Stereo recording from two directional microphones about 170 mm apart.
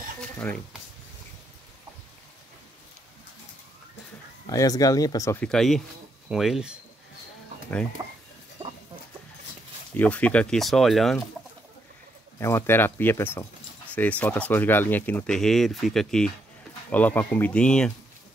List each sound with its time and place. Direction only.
0.4 s speech: 5° left (ahead or behind)
4.5 s speech: 20° left (ahead or behind)
5.4 s speech: centre (ahead or behind)
8.0 s speech: 20° right (ahead or behind)
9.9 s speech: 10° left (ahead or behind)
12.4 s speech: 15° left (ahead or behind)